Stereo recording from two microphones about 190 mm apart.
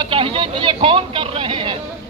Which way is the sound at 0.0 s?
25° right (ahead or behind).